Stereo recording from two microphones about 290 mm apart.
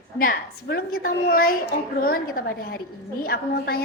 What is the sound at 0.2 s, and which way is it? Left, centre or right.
A woman's voice, left.